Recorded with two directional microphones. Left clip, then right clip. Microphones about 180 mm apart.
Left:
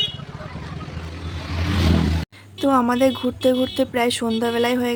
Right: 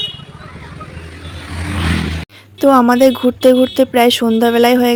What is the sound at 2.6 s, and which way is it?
Speech, 40° right (ahead or behind).